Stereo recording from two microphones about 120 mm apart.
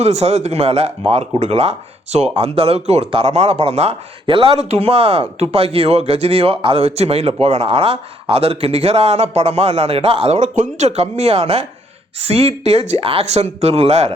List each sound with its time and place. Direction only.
0.0 s speech: 60° right (ahead or behind)